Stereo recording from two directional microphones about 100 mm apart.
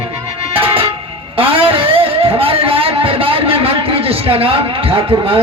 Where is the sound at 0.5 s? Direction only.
70° right (ahead or behind).